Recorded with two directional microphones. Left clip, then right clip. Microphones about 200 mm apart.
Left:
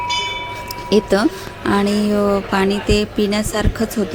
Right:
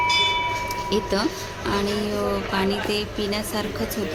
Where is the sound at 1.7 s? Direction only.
30° left (ahead or behind).